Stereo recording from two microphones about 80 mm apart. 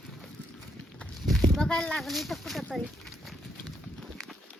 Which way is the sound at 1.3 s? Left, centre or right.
Centre.